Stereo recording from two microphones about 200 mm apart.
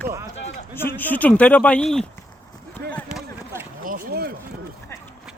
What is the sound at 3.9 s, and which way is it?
Speech, 45° right (ahead or behind).